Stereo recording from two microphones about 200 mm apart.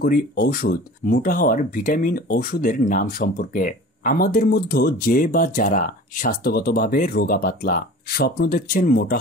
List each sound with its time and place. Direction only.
0.0 s speech: 45° left (ahead or behind)